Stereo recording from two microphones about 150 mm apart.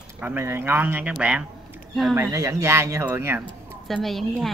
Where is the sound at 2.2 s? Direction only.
20° right (ahead or behind).